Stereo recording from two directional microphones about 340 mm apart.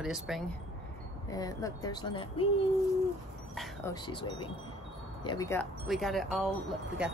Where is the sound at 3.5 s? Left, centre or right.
Centre.